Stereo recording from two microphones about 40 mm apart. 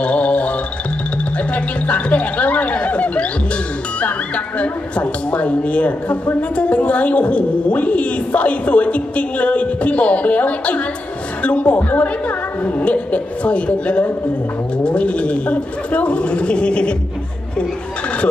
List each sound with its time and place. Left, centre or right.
0.0 s music: left
1.5 s a woman's voice: left
4.6 s a woman's voice: left